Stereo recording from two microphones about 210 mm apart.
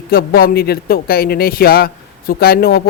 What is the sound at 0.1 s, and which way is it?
Speech, 45° left (ahead or behind).